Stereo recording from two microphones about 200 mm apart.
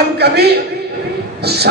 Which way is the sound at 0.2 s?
55° right (ahead or behind).